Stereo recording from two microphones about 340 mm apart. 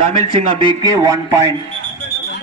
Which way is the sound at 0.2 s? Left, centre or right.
Centre.